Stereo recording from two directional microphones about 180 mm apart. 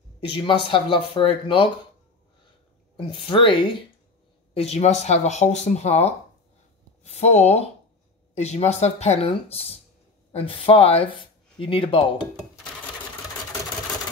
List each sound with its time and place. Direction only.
0.3 s speech: 30° left (ahead or behind)
3.0 s speech: 30° left (ahead or behind)